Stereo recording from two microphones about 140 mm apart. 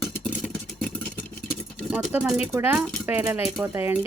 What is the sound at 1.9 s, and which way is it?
Speech, 10° right (ahead or behind).